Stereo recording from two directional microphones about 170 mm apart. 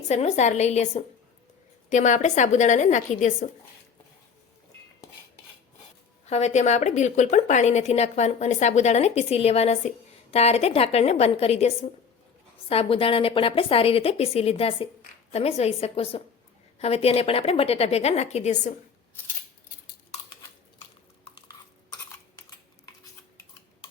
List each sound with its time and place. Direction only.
0.1 s a woman's voice: 40° left (ahead or behind)
6.2 s a woman's voice: 40° left (ahead or behind)